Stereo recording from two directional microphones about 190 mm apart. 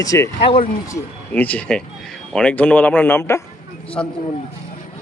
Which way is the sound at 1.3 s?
10° left (ahead or behind).